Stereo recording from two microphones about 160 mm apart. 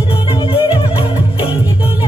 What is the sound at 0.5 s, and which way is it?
Music, 30° left (ahead or behind).